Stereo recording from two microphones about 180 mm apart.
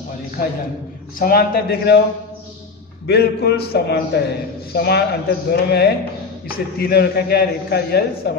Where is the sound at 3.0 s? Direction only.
65° left (ahead or behind).